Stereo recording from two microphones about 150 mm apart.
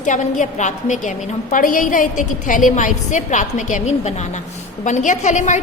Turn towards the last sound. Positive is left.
turn(degrees=50)  # may be behind; listen again after turning